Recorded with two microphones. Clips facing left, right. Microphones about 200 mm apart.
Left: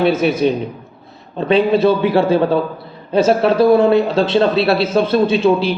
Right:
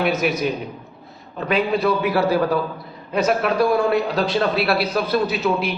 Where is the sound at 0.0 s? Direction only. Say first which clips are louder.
Left 6 dB; 30° left (ahead or behind).